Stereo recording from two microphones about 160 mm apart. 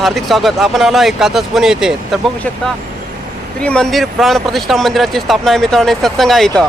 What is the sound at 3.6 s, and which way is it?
Speech, 5° left (ahead or behind).